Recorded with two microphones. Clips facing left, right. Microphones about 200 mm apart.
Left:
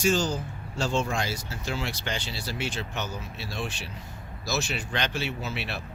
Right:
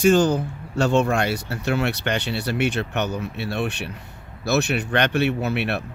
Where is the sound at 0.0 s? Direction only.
60° right (ahead or behind).